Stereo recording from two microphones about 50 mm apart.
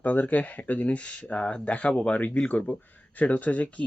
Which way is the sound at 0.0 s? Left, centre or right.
Left.